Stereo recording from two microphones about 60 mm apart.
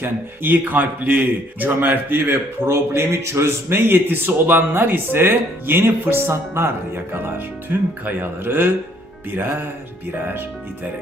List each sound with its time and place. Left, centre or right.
0.0 s speech: right
2.6 s speech: right